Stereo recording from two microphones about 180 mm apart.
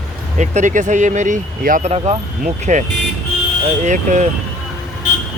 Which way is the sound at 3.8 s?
40° right (ahead or behind).